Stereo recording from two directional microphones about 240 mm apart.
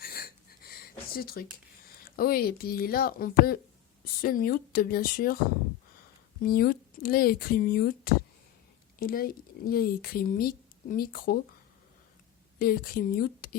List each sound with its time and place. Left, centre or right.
0.0 s a sound: left
2.0 s speech: left
6.4 s speech: left
12.5 s speech: left